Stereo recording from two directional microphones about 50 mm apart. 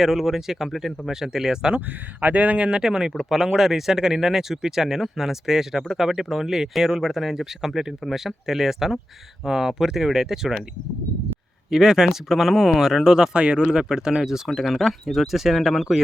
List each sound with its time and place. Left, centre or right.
0.0 s speech: centre
1.9 s speech: right; by 10.5 s centre
11.7 s speech: centre